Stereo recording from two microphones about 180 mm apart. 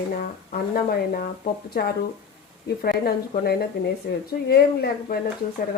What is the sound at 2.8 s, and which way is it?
Speech, 60° left (ahead or behind).